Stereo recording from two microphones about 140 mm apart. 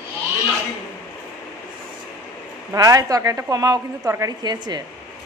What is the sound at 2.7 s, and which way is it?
A woman's voice, 25° right (ahead or behind).